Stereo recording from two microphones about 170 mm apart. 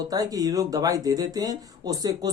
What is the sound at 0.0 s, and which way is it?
Speech, 20° right (ahead or behind).